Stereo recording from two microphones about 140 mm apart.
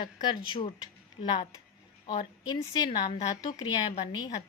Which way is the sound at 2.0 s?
30° left (ahead or behind).